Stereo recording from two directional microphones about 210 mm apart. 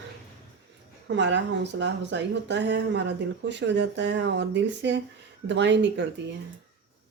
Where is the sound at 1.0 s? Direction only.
55° right (ahead or behind).